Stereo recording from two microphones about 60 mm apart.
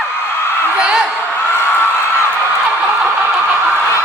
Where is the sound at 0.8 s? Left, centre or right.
Centre.